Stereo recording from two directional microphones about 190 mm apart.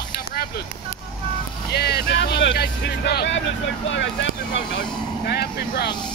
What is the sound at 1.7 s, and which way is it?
Speech, 60° left (ahead or behind).